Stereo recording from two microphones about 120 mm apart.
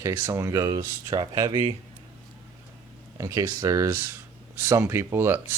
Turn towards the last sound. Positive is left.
turn(degrees=-20)  # may be behind; listen again after turning